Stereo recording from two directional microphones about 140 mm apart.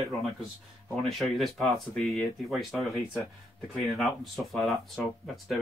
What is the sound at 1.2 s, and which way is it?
Speech, centre (ahead or behind).